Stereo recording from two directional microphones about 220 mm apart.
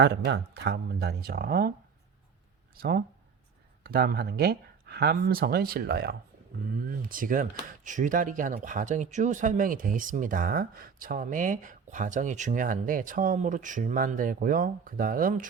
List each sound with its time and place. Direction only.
0.0 s speech: 50° right (ahead or behind)
3.8 s speech: 45° right (ahead or behind)